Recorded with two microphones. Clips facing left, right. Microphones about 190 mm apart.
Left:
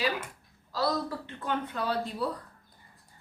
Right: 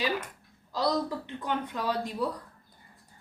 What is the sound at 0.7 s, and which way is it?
Speech, 20° right (ahead or behind).